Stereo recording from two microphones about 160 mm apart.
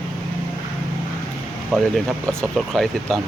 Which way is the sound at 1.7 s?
Centre (ahead or behind).